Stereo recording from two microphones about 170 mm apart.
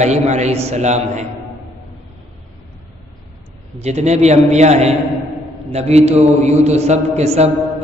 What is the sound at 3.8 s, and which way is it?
A man's voice, 40° right (ahead or behind).